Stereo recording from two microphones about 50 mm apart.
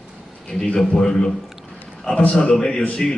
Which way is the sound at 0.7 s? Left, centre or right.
Centre.